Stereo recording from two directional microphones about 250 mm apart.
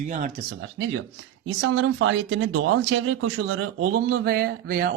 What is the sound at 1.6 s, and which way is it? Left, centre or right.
Speech, right.